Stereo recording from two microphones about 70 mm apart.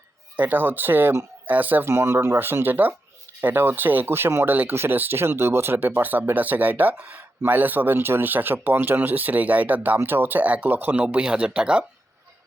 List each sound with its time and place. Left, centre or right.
0.3 s speech: right
1.9 s speech: right
11.0 s speech: centre